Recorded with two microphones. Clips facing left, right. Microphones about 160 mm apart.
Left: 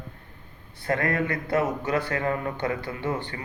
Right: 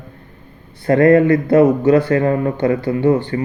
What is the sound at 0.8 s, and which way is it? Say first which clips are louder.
Speech: right 15 dB; 35° right (ahead or behind).